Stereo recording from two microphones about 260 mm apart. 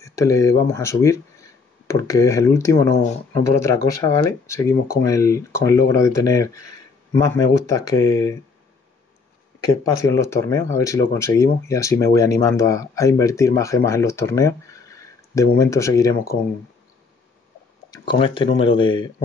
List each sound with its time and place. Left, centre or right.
0.0 s speech: centre
9.6 s speech: centre
17.9 s speech: centre